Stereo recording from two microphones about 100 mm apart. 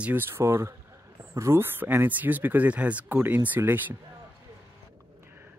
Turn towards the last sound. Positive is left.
turn(degrees=-20)  # may be behind; listen again after turning